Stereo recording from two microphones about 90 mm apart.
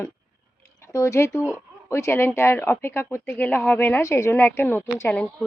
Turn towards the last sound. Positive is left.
turn(degrees=25)  # may be behind; listen again after turning